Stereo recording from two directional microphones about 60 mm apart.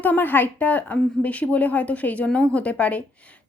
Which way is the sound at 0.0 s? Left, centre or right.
Left.